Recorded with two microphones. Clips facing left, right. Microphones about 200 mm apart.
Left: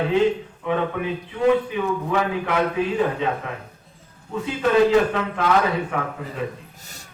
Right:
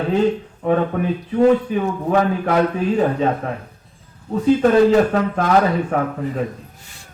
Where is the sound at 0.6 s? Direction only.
40° right (ahead or behind).